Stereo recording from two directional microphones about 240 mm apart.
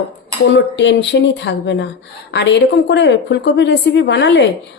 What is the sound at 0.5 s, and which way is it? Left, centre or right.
A woman's voice, left.